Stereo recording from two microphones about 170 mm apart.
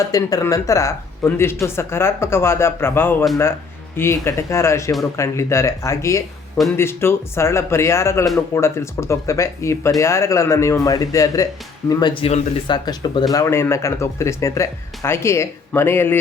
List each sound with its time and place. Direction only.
0.1 s speech: 20° left (ahead or behind)